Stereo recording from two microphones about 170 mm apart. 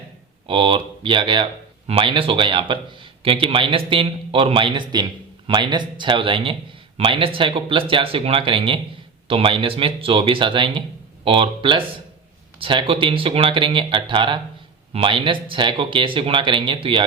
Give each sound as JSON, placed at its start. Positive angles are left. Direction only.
{"t": 0.4, "sound": "a man's voice", "side_deg": -30}